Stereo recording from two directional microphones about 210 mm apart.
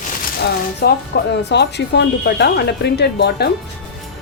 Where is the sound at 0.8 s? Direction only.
50° left (ahead or behind).